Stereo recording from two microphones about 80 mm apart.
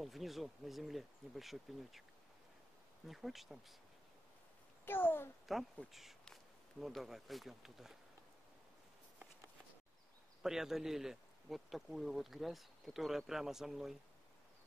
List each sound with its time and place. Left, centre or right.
0.0 s speech: centre
3.1 s speech: centre
4.8 s a child's voice: left
5.9 s speech: centre
10.4 s speech: centre